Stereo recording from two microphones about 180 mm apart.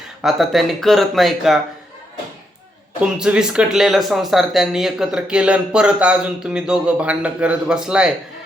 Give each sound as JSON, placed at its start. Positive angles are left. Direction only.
{"t": 0.2, "sound": "speech", "side_deg": 0}
{"t": 3.0, "sound": "speech", "side_deg": -5}